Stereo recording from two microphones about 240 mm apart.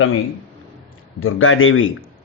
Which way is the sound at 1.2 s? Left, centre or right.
Left.